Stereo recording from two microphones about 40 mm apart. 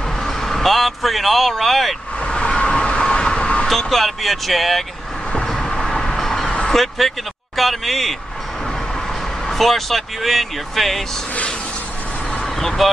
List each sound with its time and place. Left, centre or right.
0.2 s speech: centre
2.2 s vehicle: left
3.6 s speech: centre
5.5 s vehicle: centre
6.7 s a sound: centre
7.5 s speech: centre
9.5 s speech: centre
12.5 s speech: centre